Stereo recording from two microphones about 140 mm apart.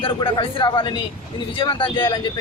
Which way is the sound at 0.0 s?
35° left (ahead or behind).